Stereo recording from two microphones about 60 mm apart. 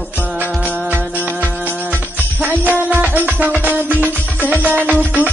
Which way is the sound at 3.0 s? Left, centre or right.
Right.